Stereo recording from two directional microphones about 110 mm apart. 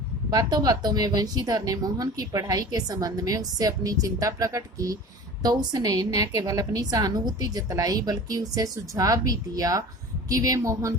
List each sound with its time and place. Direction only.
0.3 s speech: 35° right (ahead or behind)